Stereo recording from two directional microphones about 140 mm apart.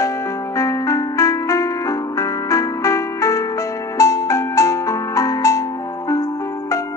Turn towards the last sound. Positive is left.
turn(degrees=20)  # may be behind; listen again after turning